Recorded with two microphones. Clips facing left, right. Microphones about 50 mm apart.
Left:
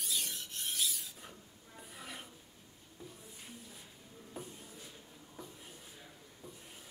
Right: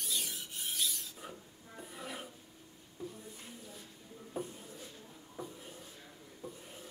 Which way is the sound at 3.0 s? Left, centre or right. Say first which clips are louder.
Right 7 dB; centre.